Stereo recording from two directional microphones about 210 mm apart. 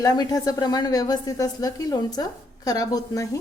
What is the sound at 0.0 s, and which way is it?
A woman's voice, 20° left (ahead or behind).